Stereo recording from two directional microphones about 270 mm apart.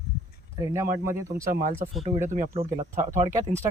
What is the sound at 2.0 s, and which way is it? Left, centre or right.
Speech, right.